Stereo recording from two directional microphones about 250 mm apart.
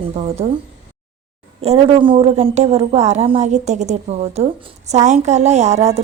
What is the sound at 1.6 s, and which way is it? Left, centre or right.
A woman's voice, right.